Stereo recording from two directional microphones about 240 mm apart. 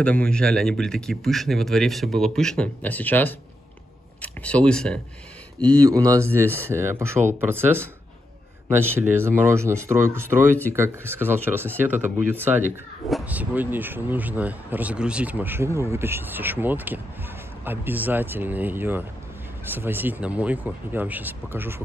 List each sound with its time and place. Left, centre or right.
0.0 s speech: centre
5.8 s speech: centre